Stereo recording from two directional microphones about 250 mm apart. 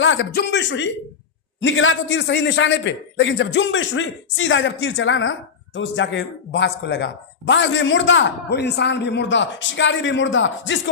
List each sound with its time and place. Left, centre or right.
0.0 s a man's voice: left